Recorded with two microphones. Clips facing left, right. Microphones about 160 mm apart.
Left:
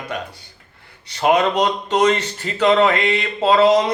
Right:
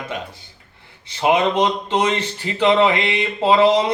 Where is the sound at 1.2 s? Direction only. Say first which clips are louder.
Even; 10° right (ahead or behind).